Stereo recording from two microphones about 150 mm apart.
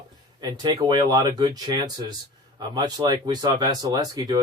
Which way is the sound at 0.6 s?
30° right (ahead or behind).